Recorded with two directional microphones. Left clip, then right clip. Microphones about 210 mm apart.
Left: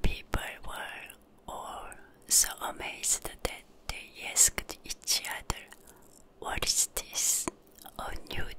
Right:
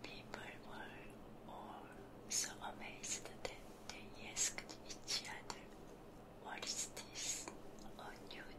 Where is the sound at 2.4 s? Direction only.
50° left (ahead or behind).